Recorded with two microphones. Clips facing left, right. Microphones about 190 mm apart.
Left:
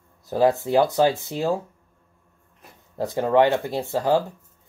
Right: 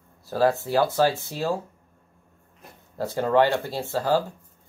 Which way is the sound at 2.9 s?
15° left (ahead or behind).